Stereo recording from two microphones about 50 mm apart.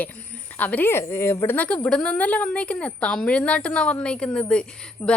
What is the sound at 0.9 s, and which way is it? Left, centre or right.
Speech, left.